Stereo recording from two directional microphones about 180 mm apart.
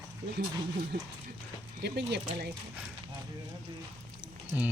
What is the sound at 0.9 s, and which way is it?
Speech, 60° right (ahead or behind).